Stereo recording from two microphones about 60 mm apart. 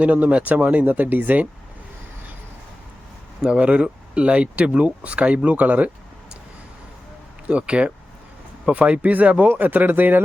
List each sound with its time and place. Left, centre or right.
0.0 s speech: right
3.4 s speech: centre
7.4 s speech: right